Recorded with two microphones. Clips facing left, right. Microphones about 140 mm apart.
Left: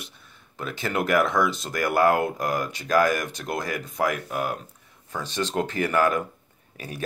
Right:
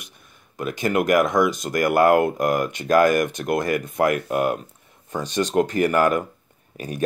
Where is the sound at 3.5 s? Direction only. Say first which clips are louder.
Right 5 dB; 55° right (ahead or behind).